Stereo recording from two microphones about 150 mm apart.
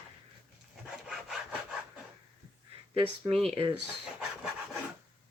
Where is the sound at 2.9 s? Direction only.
40° right (ahead or behind).